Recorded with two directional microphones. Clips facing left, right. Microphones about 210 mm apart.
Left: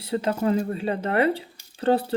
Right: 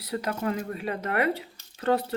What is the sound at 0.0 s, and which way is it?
Speech, 25° left (ahead or behind).